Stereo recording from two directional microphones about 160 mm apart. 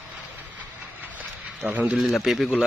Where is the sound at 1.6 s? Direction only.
10° right (ahead or behind).